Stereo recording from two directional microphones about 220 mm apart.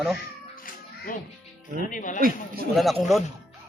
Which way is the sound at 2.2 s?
40° right (ahead or behind).